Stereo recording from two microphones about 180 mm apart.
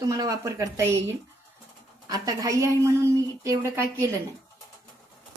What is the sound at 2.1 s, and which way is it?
A woman's voice, 20° right (ahead or behind).